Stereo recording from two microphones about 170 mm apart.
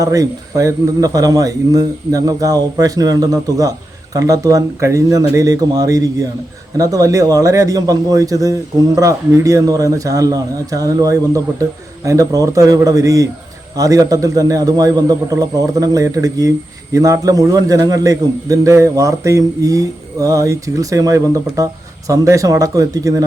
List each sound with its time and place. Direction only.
0.0 s a man's voice: 20° right (ahead or behind)